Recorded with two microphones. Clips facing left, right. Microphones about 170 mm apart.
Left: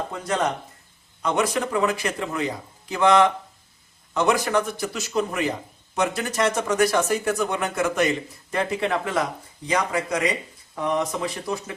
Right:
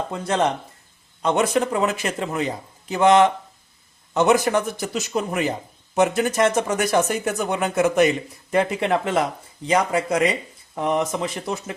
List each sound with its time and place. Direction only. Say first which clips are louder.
0.1 s a man's voice: right 4 dB; 25° right (ahead or behind)